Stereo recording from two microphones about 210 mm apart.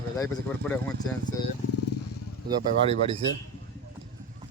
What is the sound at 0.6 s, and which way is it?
Speech, 5° left (ahead or behind).